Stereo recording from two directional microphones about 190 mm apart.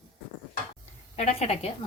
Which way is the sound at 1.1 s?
35° left (ahead or behind).